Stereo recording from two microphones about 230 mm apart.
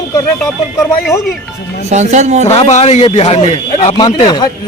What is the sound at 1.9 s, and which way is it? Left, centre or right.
Speech, right.